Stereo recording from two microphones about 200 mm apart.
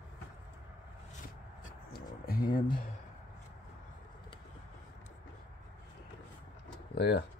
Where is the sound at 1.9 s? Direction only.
50° left (ahead or behind).